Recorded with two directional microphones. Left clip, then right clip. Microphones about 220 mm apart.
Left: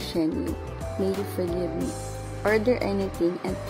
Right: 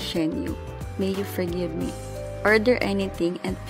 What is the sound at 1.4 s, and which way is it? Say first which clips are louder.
Speech: even; 25° right (ahead or behind).